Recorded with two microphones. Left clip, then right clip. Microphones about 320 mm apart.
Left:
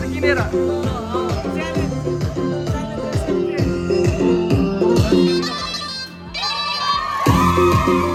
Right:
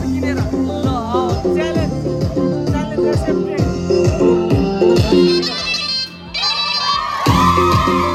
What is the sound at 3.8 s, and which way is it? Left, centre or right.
Music, centre.